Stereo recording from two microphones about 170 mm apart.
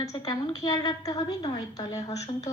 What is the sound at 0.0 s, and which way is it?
A woman's voice, 20° left (ahead or behind).